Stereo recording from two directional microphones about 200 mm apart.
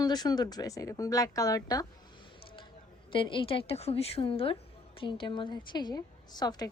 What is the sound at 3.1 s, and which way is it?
Speech, 25° left (ahead or behind).